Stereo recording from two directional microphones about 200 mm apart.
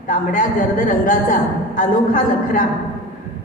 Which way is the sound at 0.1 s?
40° left (ahead or behind).